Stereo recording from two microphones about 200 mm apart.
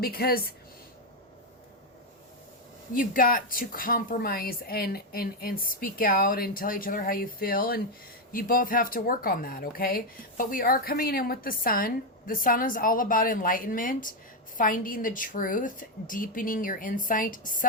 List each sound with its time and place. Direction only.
0.0 s speech: 50° left (ahead or behind)
2.9 s speech: 45° left (ahead or behind)